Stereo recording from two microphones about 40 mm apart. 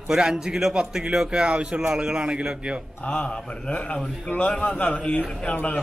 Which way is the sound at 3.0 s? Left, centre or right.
Left.